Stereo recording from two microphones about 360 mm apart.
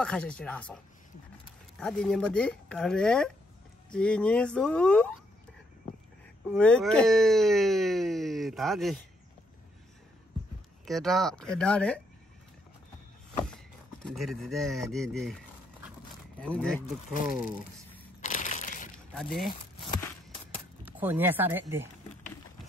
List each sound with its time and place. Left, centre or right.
0.0 s speech: centre
1.8 s speech: centre
6.5 s speech: centre
10.9 s speech: centre
14.0 s speech: centre
16.8 s speech: left
18.2 s crushing: left
20.8 s speech: centre